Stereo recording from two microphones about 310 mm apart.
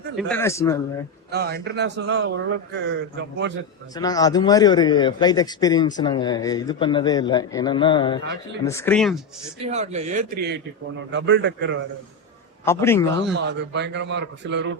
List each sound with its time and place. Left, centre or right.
0.2 s a man's voice: centre
1.3 s a man's voice: right
3.9 s a man's voice: centre
9.6 s a man's voice: right
12.6 s a man's voice: centre
13.3 s a man's voice: right